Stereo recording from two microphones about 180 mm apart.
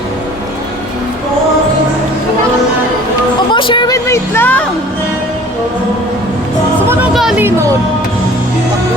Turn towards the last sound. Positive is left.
turn(degrees=-15)  # may be behind; listen again after turning